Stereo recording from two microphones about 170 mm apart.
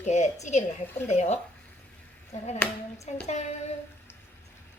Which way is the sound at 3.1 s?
40° left (ahead or behind).